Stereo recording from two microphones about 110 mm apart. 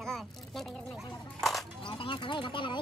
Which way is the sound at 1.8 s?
50° left (ahead or behind).